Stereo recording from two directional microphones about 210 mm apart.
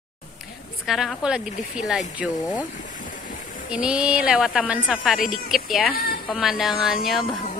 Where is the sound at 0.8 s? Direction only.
Centre (ahead or behind).